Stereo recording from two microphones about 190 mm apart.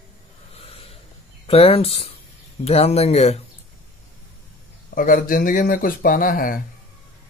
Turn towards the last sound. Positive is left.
turn(degrees=50)  # may be behind; listen again after turning